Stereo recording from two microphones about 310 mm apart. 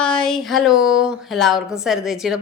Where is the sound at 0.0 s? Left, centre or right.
Centre.